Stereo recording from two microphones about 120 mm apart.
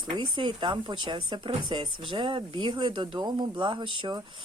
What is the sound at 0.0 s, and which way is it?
Speech, 40° right (ahead or behind).